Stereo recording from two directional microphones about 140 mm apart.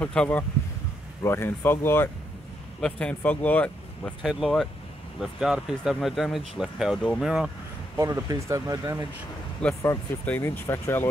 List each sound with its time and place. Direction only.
0.0 s speech: 10° left (ahead or behind)
8.0 s speech: 25° right (ahead or behind)
9.8 s speech: 15° left (ahead or behind)